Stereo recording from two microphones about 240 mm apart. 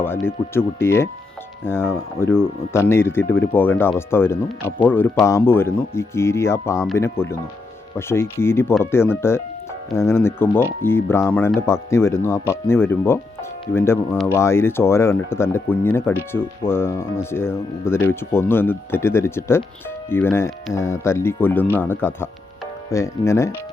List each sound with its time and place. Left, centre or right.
0.3 s speech: centre